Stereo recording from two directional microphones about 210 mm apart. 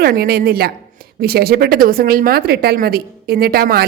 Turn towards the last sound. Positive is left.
turn(degrees=-45)  # may be behind; listen again after turning